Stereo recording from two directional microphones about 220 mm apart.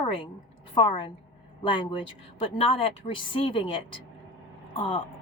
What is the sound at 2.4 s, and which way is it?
A woman's voice, 25° left (ahead or behind).